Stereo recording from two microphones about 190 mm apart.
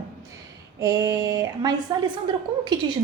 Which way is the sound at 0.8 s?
20° right (ahead or behind).